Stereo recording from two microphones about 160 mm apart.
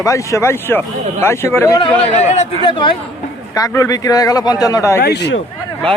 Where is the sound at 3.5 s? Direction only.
20° left (ahead or behind).